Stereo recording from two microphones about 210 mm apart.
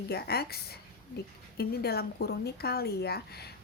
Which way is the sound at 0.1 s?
50° left (ahead or behind).